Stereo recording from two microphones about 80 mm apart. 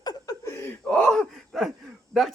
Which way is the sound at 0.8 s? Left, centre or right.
Centre.